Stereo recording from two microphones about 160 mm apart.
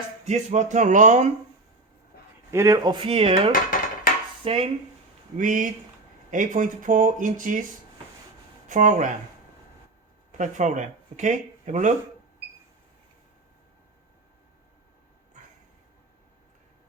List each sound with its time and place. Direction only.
0.3 s speech: 45° right (ahead or behind)
2.5 s speech: 20° right (ahead or behind); by 3.5 s 35° right (ahead or behind)
3.5 s dishes: 60° left (ahead or behind)
4.4 s speech: 35° right (ahead or behind)
5.4 s speech: 55° right (ahead or behind)
8.6 s speech: 50° right (ahead or behind)
10.3 s speech: 50° right (ahead or behind)